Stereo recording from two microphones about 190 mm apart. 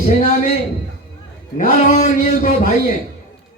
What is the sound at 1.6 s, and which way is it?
Speech, 45° left (ahead or behind).